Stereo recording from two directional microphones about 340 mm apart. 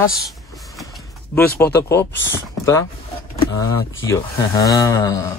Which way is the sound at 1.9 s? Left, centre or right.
Left.